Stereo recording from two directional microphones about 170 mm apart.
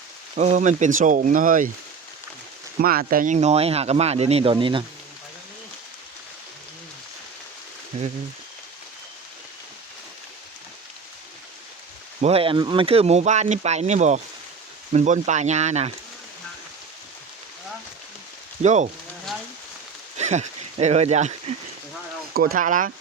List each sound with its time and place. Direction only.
0.3 s speech: 45° right (ahead or behind)
2.8 s speech: 55° right (ahead or behind); by 4.8 s 30° right (ahead or behind)
12.2 s speech: 35° right (ahead or behind)
18.6 s speech: 45° right (ahead or behind)
20.1 s speech: 40° right (ahead or behind)
22.4 s speech: 55° right (ahead or behind)